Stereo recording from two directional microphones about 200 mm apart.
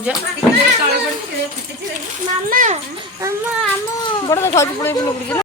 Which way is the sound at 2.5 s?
40° right (ahead or behind).